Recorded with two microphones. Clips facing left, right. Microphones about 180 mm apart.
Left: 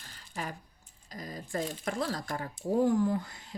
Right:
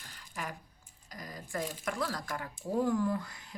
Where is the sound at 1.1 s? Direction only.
25° left (ahead or behind).